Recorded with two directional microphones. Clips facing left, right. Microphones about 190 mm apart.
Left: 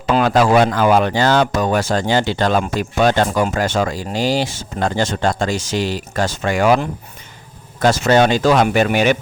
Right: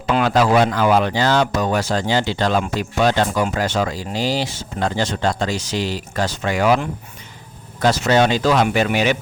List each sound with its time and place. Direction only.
0.1 s speech: 45° left (ahead or behind)